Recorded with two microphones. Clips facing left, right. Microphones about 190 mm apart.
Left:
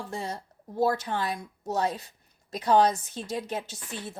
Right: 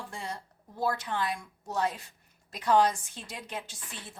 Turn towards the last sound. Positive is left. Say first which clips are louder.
# left 8 dB
turn(degrees=40)  # may be behind; listen again after turning